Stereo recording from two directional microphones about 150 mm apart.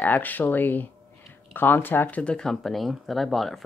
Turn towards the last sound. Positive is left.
turn(degrees=0)  # may be behind; listen again after turning